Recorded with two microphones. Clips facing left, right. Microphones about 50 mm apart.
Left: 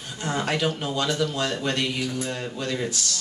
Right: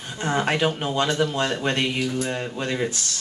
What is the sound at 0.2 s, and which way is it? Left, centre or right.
Speech, right.